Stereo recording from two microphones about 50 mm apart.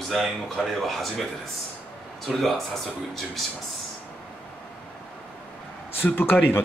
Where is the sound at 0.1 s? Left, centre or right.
Centre.